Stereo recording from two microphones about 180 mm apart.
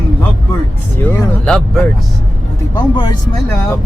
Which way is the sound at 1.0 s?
10° left (ahead or behind).